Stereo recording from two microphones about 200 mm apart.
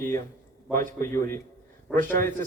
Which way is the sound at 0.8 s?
45° right (ahead or behind).